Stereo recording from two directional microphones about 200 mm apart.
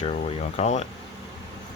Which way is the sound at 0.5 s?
35° left (ahead or behind).